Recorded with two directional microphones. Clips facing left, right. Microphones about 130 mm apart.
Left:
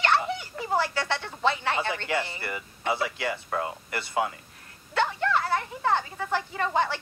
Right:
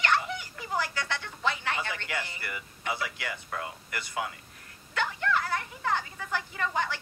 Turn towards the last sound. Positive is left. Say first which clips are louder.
# left 5 dB
turn(degrees=30)  # may be behind; listen again after turning